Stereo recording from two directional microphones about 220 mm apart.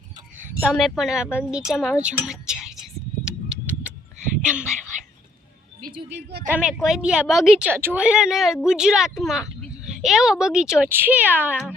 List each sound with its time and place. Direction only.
0.6 s a woman's voice: centre (ahead or behind)
2.2 s a sound: 5° right (ahead or behind)
4.4 s speech: 5° right (ahead or behind)
6.1 s a woman's voice: 50° right (ahead or behind)
6.5 s a woman's voice: 5° right (ahead or behind)